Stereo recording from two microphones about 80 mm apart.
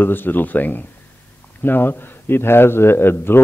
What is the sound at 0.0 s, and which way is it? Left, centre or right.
A man's voice, left.